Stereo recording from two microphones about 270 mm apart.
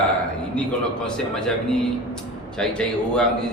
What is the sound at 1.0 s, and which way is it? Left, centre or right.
A man's voice, centre.